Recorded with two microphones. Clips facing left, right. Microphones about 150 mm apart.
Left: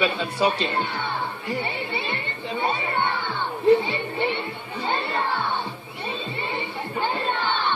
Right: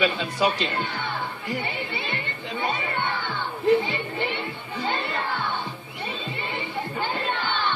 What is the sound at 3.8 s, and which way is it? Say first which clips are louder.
Chatter: left 3 dB; 25° left (ahead or behind).